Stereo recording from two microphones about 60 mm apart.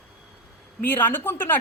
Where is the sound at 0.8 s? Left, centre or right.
Left.